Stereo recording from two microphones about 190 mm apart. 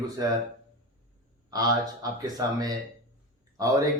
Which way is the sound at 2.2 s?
20° right (ahead or behind).